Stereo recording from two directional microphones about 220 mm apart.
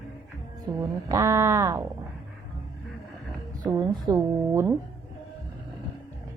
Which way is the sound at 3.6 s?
15° right (ahead or behind).